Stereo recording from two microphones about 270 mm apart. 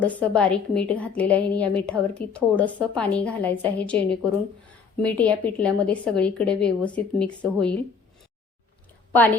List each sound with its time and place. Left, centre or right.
0.0 s a woman's voice: centre